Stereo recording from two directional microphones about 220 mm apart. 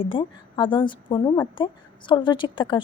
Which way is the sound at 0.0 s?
25° left (ahead or behind).